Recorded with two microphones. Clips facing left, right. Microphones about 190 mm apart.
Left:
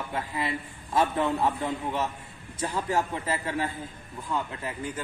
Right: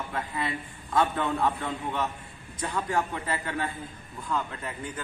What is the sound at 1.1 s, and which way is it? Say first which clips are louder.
A man's voice: left 1 dB; 25° left (ahead or behind).